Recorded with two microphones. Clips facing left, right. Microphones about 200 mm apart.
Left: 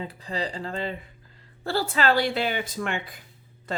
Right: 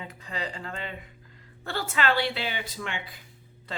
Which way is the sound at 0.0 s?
35° left (ahead or behind).